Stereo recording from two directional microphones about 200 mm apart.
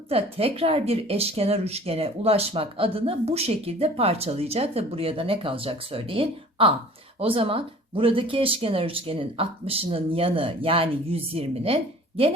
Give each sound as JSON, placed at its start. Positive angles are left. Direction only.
{"t": 0.1, "sound": "speech", "side_deg": -30}